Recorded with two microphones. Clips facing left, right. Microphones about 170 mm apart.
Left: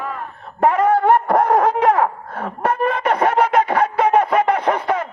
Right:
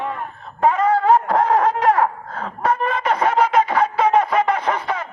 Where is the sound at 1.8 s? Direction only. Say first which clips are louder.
Left 1 dB; 60° left (ahead or behind).